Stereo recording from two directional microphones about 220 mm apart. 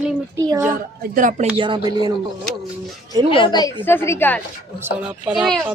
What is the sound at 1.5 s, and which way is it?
Speech, 20° right (ahead or behind).